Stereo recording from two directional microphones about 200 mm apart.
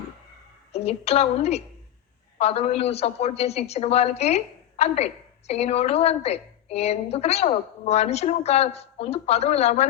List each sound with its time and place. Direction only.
0.7 s a woman's voice: 30° left (ahead or behind)